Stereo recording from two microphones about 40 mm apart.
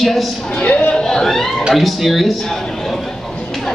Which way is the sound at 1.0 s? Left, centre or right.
Centre.